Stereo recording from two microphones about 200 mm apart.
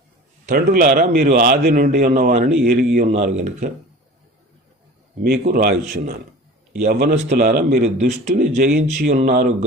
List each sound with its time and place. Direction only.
0.4 s a man's voice: 45° right (ahead or behind)
5.2 s a man's voice: 50° right (ahead or behind)
6.8 s a man's voice: 50° right (ahead or behind)